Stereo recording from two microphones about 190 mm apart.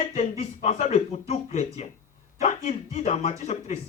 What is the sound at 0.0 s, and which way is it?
A man's voice, 35° left (ahead or behind).